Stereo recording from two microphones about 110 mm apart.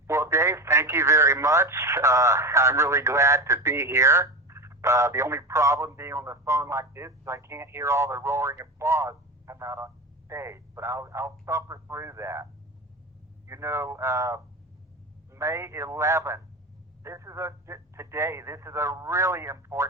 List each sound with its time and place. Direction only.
0.1 s speech: 25° right (ahead or behind)
13.5 s speech: 25° right (ahead or behind)